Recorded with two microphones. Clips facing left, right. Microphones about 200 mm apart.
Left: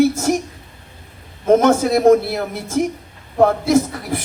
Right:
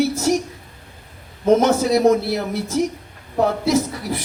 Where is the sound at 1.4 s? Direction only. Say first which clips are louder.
Left 2 dB; 50° left (ahead or behind).